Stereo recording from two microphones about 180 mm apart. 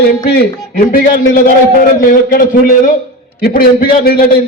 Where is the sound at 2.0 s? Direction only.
55° left (ahead or behind).